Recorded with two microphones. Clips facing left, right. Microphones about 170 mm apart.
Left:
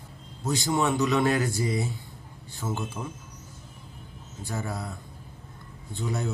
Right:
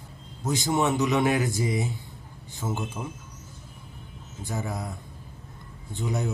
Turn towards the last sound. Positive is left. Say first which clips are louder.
# right 1 dB
turn(degrees=-20)  # may be behind; listen again after turning